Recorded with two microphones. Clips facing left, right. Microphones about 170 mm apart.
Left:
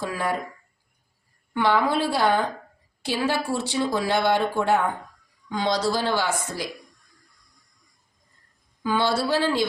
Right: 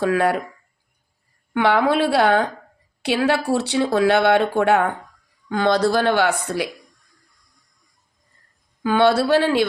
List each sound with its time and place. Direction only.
0.0 s speech: 65° right (ahead or behind)
1.5 s speech: 65° right (ahead or behind)
8.8 s speech: 60° right (ahead or behind)